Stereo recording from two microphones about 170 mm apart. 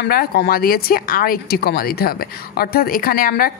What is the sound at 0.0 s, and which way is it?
Speech, 60° left (ahead or behind).